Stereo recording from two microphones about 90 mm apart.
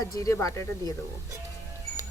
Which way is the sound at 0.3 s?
30° left (ahead or behind).